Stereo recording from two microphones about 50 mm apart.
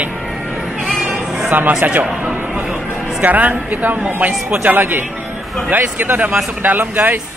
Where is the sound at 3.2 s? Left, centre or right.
Right.